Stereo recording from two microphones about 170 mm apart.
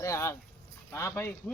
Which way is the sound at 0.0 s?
20° left (ahead or behind).